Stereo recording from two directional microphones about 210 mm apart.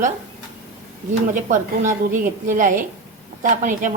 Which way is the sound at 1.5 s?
40° right (ahead or behind).